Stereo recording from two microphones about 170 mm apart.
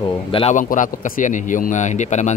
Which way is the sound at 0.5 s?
50° left (ahead or behind).